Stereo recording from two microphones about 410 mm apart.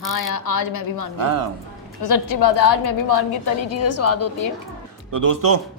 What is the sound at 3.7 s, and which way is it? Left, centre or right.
Speech, left.